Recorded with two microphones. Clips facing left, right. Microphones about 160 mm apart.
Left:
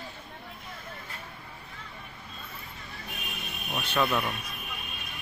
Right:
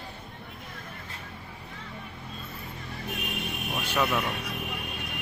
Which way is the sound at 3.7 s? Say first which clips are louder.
Even; 15° right (ahead or behind).